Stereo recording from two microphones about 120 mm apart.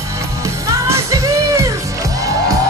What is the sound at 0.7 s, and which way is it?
Music, 25° right (ahead or behind).